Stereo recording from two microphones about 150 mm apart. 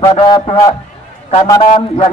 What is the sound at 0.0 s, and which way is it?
Speech, 30° left (ahead or behind).